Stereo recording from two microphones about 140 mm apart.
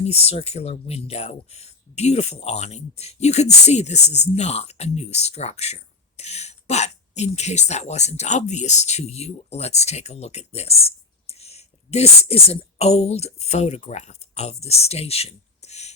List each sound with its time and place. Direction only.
0.0 s speech: 45° left (ahead or behind)